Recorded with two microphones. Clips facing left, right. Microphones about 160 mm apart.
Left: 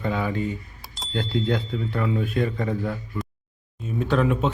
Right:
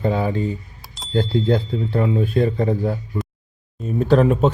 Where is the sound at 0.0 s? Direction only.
30° right (ahead or behind).